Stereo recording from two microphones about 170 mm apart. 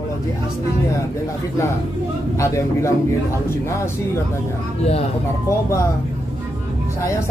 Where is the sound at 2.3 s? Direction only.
15° left (ahead or behind).